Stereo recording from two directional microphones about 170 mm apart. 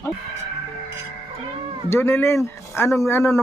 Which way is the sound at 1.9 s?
15° left (ahead or behind).